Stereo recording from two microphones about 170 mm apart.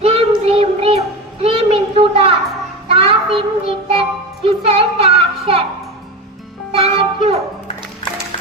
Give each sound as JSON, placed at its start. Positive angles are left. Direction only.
{"t": 0.0, "sound": "child singing", "side_deg": -35}
{"t": 4.4, "sound": "music", "side_deg": -35}
{"t": 6.7, "sound": "music", "side_deg": -35}